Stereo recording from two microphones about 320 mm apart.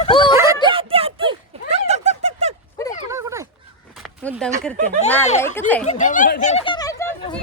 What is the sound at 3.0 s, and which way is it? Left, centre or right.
Dog, centre.